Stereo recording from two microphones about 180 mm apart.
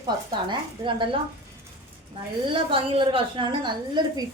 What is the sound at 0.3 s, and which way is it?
Speech, 25° right (ahead or behind).